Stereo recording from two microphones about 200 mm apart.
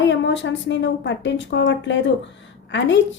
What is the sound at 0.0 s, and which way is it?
A woman's voice, 65° left (ahead or behind).